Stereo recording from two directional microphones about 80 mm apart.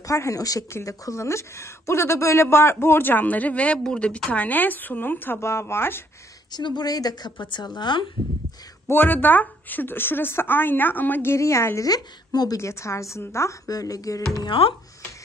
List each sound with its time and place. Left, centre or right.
0.0 s a woman's voice: left
6.5 s a woman's voice: left
8.8 s a woman's voice: left
11.3 s a woman's voice: left
11.9 s a woman's voice: left
14.4 s speech: left